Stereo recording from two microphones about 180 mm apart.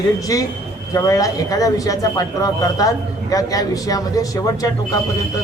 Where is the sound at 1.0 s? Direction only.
20° left (ahead or behind).